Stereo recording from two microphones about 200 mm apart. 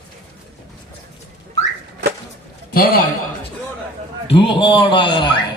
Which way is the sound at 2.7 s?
50° left (ahead or behind).